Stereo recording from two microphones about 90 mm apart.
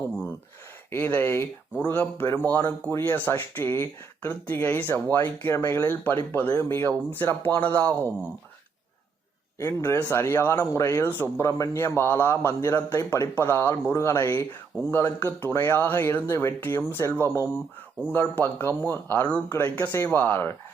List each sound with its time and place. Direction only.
0.9 s speech: 25° left (ahead or behind)
9.6 s speech: 25° left (ahead or behind)